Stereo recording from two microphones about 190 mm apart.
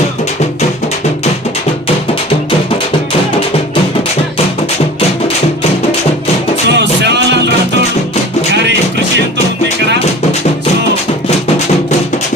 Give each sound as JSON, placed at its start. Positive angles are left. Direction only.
{"t": 6.7, "sound": "music", "side_deg": -65}